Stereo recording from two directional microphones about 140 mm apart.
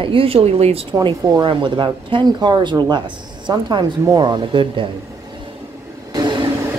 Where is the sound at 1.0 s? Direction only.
35° right (ahead or behind).